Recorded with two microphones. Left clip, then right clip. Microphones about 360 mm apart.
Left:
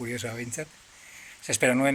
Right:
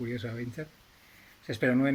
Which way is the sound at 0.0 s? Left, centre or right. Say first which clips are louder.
Left 3 dB; left.